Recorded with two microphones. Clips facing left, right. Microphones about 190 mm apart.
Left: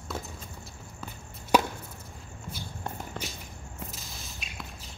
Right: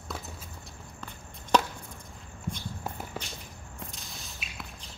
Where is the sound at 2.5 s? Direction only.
5° left (ahead or behind).